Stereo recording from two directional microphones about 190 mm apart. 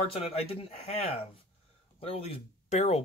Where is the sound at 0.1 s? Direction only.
30° left (ahead or behind).